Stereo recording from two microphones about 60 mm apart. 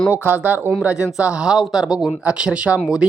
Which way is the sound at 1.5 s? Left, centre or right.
Centre.